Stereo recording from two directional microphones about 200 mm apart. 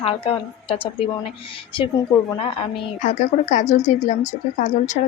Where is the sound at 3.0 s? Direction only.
40° left (ahead or behind).